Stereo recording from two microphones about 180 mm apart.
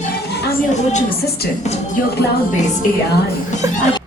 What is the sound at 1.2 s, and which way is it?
Speech, 60° left (ahead or behind).